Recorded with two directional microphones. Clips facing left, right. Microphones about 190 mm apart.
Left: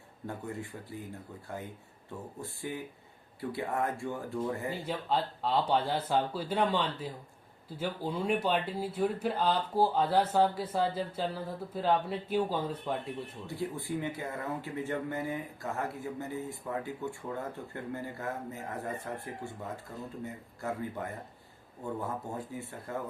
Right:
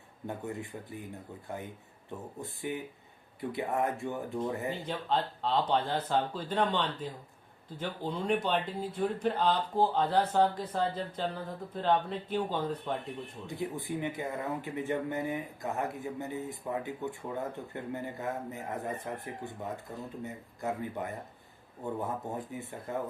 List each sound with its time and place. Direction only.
0.3 s speech: 20° right (ahead or behind)
2.4 s speech: 20° right (ahead or behind)
4.9 s speech: 10° left (ahead or behind)
13.5 s speech: 20° right (ahead or behind)